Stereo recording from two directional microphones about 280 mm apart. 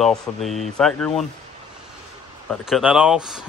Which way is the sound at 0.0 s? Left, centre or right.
Centre.